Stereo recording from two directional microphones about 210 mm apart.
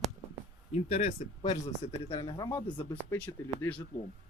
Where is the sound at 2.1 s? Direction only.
20° left (ahead or behind).